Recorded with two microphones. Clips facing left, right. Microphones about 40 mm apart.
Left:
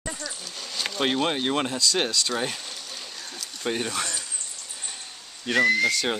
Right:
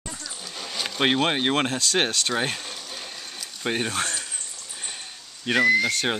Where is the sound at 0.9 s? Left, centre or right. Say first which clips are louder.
Right 3 dB; right.